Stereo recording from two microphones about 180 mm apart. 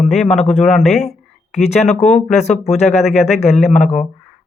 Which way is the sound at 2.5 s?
Centre (ahead or behind).